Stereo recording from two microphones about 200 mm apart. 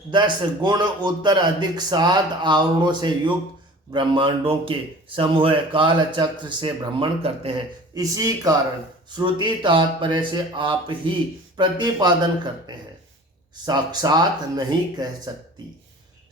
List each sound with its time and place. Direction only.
0.1 s speech: 25° right (ahead or behind)
7.9 s speech: 15° right (ahead or behind)
13.7 s speech: 20° right (ahead or behind)